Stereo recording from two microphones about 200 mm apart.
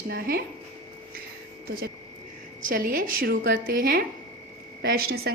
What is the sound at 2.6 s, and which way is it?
A woman's voice, 45° right (ahead or behind).